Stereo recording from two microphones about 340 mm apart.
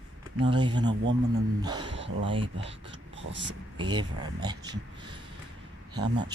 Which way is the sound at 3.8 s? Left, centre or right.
Centre.